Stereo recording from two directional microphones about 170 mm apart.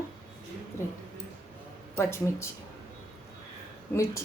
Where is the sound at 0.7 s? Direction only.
15° left (ahead or behind).